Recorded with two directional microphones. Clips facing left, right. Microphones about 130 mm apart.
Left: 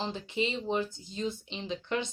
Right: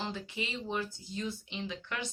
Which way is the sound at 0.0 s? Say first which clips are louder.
Left 6 dB; 25° left (ahead or behind).